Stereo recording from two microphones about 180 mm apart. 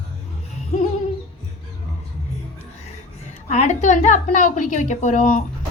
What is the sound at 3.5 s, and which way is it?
A woman's voice, 40° left (ahead or behind).